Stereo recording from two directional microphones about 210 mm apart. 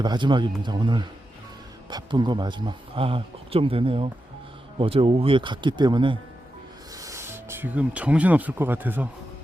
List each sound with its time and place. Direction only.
0.0 s speech: 20° right (ahead or behind)